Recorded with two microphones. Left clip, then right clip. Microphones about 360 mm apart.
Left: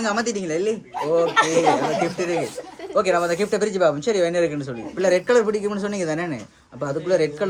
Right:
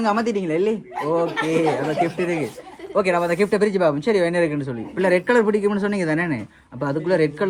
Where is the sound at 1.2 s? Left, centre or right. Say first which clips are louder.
Left 5 dB; left.